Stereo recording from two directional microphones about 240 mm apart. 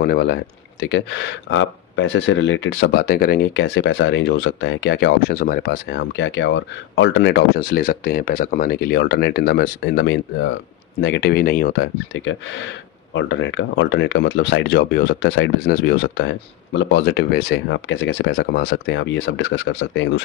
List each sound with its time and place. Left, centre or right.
0.0 s speech: left